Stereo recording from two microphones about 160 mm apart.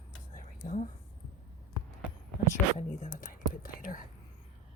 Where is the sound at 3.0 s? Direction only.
55° left (ahead or behind).